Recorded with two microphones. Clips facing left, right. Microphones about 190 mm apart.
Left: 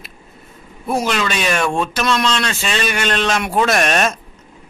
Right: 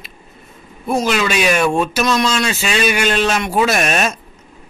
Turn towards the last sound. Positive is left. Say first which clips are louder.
# even
turn(degrees=-5)  # may be behind; listen again after turning